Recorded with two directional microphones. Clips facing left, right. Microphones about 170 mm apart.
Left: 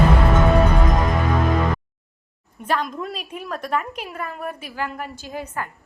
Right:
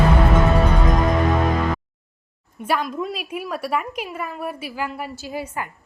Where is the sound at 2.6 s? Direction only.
10° right (ahead or behind).